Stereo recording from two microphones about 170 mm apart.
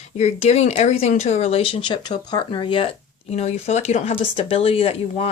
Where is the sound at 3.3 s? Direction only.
40° left (ahead or behind).